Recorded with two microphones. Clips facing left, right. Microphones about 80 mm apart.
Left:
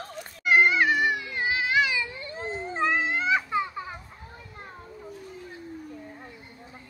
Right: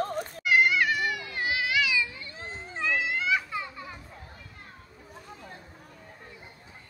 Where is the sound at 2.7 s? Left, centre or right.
Left.